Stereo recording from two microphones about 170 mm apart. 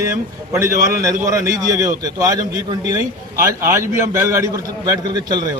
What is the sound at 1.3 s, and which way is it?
A man's voice, 20° right (ahead or behind).